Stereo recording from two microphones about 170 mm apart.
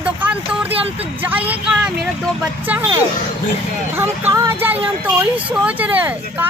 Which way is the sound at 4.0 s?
15° right (ahead or behind).